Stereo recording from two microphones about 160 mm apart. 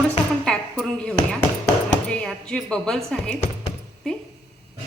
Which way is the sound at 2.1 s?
5° left (ahead or behind).